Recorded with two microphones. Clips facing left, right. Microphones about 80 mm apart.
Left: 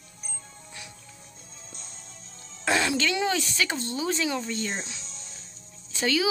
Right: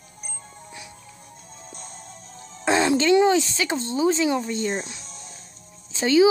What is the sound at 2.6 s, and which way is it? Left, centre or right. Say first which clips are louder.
Speech: right 6 dB; right.